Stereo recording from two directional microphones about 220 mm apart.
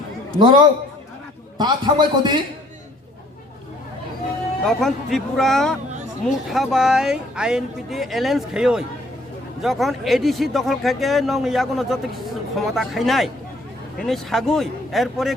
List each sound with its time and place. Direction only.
0.3 s a man's voice: 20° right (ahead or behind)
4.6 s speech: centre (ahead or behind)